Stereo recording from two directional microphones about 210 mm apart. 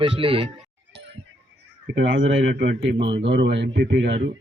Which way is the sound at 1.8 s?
60° right (ahead or behind).